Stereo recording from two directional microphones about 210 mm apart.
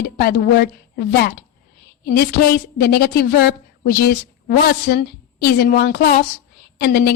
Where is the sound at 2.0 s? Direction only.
50° left (ahead or behind).